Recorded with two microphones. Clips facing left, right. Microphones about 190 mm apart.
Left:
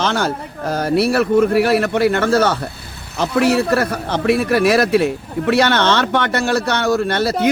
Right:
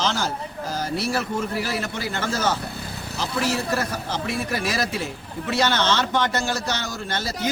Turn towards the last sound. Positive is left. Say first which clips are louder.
# left 11 dB
turn(degrees=65)  # may be behind; listen again after turning